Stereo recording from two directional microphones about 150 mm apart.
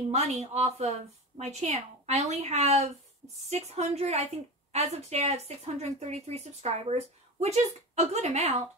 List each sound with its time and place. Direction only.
0.1 s speech: 50° right (ahead or behind)